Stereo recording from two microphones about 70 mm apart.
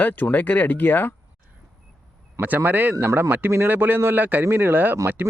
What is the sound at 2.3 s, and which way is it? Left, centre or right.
Speech, right.